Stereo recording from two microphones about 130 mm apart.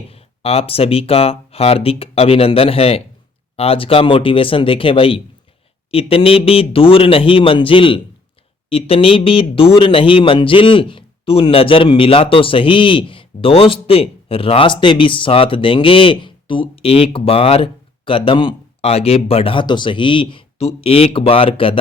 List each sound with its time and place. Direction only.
0.1 s speech: 50° left (ahead or behind)
18.8 s speech: 55° left (ahead or behind)